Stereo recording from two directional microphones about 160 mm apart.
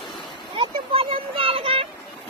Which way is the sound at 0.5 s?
35° right (ahead or behind).